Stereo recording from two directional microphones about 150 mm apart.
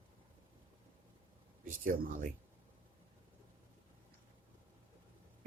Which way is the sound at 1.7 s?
65° right (ahead or behind).